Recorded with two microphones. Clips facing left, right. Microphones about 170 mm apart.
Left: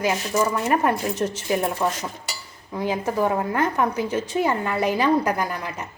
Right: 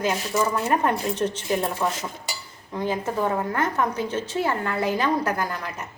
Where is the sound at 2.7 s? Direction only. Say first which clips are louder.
Left 2 dB; 10° left (ahead or behind).